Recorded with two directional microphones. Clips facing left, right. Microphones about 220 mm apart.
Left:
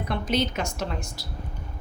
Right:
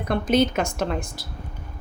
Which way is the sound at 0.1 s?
50° right (ahead or behind).